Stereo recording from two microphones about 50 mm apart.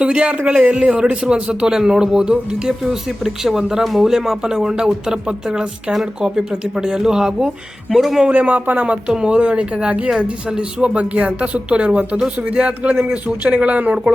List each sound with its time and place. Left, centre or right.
0.0 s a man's voice: right
8.3 s speech: right